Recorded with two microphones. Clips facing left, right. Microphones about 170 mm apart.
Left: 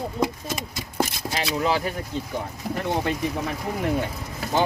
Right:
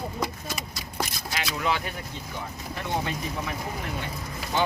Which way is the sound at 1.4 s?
35° left (ahead or behind).